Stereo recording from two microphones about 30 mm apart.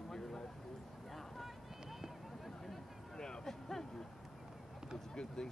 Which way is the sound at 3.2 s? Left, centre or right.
Left.